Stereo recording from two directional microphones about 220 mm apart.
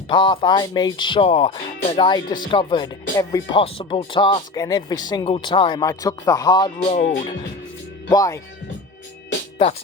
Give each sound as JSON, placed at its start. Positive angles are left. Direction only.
{"t": 0.1, "sound": "speech", "side_deg": 20}
{"t": 8.1, "sound": "speech", "side_deg": 15}